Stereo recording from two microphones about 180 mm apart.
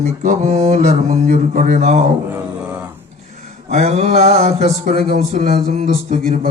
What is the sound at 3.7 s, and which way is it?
Speech, 40° right (ahead or behind).